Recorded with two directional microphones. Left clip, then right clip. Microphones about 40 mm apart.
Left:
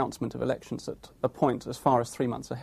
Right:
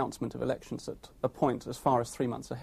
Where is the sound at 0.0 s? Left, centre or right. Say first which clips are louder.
Left 3 dB; left.